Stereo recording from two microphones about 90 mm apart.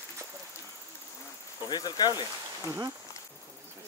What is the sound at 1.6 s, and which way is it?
Speech, 50° left (ahead or behind).